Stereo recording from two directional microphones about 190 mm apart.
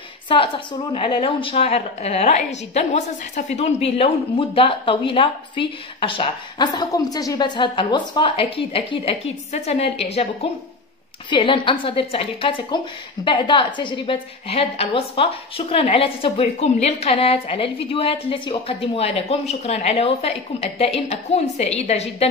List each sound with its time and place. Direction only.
0.9 s a woman's voice: 25° left (ahead or behind)
11.2 s a woman's voice: 25° left (ahead or behind)